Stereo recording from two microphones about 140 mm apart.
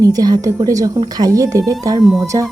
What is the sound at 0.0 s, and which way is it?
Speech, 25° right (ahead or behind).